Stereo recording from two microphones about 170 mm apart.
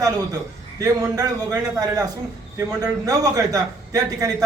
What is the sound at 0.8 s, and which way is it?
Speech, 20° right (ahead or behind).